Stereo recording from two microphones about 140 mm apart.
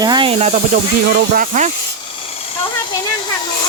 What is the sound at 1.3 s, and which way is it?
Speech, 65° right (ahead or behind).